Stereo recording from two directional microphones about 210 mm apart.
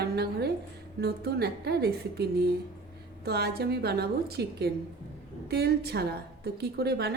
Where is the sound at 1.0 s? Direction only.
50° right (ahead or behind).